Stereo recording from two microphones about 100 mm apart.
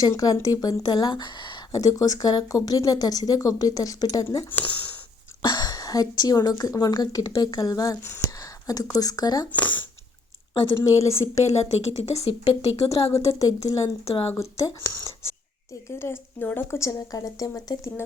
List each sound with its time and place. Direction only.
0.0 s a woman's voice: 40° left (ahead or behind)
1.7 s a woman's voice: 35° left (ahead or behind)
5.5 s a woman's voice: 40° left (ahead or behind)
8.4 s a sound: 35° left (ahead or behind)
9.0 s a woman's voice: 40° left (ahead or behind)
9.6 s speech: 15° left (ahead or behind)
10.8 s a woman's voice: 30° left (ahead or behind)
11.6 s speech: 90° left
13.1 s a woman's voice: 30° left (ahead or behind)
14.0 s speech: 75° left (ahead or behind)
14.3 s a woman's voice: 30° left (ahead or behind)